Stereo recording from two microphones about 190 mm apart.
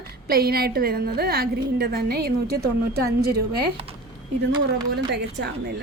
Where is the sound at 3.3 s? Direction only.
55° right (ahead or behind).